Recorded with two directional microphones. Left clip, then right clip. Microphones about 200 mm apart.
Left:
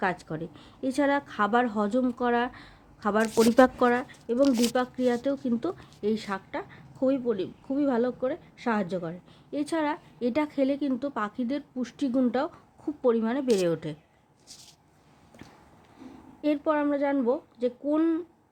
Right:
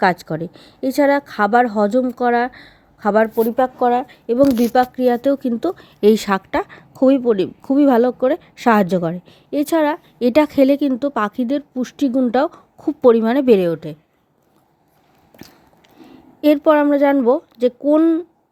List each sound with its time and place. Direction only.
0.0 s a woman's voice: 30° right (ahead or behind)
4.1 s a woman's voice: 35° right (ahead or behind)
6.0 s a woman's voice: 45° right (ahead or behind)
13.6 s a woman's voice: 20° right (ahead or behind)
16.4 s a woman's voice: 40° right (ahead or behind)